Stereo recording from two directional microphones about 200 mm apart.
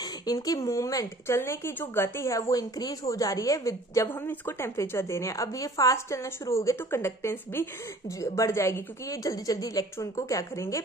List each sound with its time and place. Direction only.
0.0 s speech: 20° left (ahead or behind)